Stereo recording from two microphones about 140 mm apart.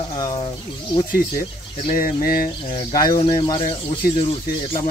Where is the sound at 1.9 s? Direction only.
90° left.